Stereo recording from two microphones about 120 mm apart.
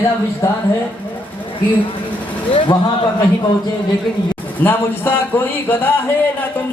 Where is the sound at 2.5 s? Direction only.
50° left (ahead or behind).